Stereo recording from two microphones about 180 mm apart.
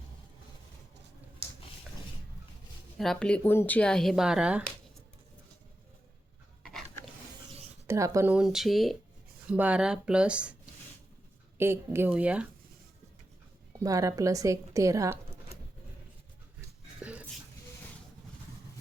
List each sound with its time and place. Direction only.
3.0 s speech: 5° left (ahead or behind)
6.7 s dog: centre (ahead or behind)
7.9 s a woman's voice: 15° right (ahead or behind)
11.5 s a woman's voice: 15° right (ahead or behind)
13.7 s a woman's voice: 15° right (ahead or behind)
17.0 s a sound: 5° right (ahead or behind)